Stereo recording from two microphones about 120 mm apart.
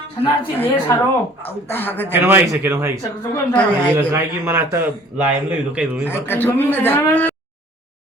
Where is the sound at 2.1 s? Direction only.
15° right (ahead or behind).